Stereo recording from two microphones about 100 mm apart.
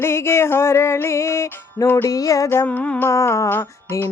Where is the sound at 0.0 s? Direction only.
25° left (ahead or behind).